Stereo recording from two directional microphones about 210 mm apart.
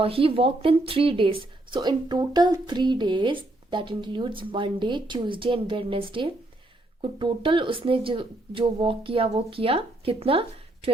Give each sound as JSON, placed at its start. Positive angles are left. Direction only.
{"t": 0.0, "sound": "speech", "side_deg": -25}